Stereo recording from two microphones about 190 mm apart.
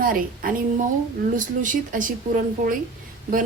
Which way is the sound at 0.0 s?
50° right (ahead or behind).